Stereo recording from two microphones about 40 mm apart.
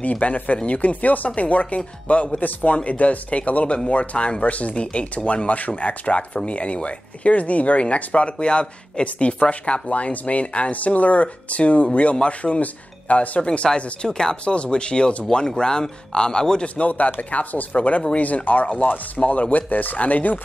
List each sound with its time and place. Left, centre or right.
0.0 s speech: left
14.0 s speech: centre
14.3 s speech: left
16.6 s speech: left